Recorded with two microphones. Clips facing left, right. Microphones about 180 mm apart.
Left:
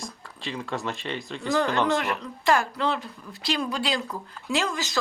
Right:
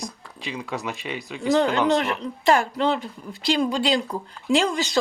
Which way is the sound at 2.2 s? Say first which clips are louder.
Right 3 dB; 25° right (ahead or behind).